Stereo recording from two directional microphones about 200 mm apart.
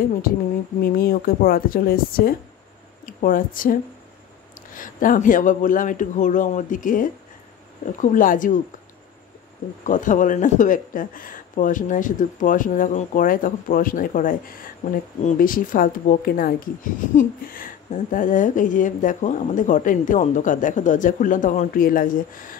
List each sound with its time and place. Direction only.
0.8 s speech: 45° left (ahead or behind)
4.7 s a woman's voice: 45° left (ahead or behind)
9.8 s a woman's voice: 40° left (ahead or behind)